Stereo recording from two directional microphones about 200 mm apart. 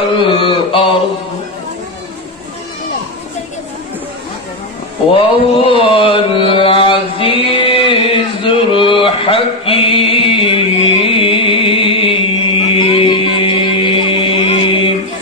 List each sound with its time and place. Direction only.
0.3 s mantra: 25° left (ahead or behind)
5.1 s mantra: 25° left (ahead or behind)